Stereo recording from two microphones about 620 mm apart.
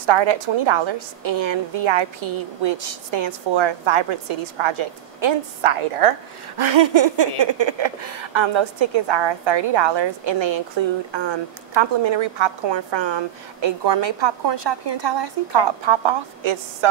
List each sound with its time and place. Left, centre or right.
0.0 s a woman's voice: right
6.6 s a woman's voice: right